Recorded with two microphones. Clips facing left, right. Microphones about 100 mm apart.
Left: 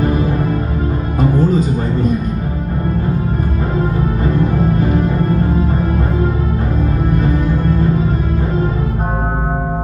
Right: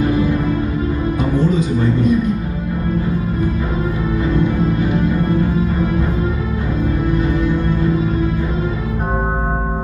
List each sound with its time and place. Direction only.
1.4 s music: 45° left (ahead or behind)